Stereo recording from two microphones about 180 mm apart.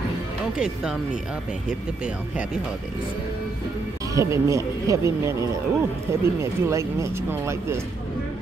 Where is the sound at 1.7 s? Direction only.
5° right (ahead or behind).